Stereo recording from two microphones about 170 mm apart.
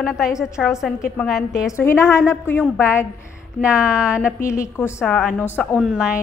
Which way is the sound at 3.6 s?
5° right (ahead or behind).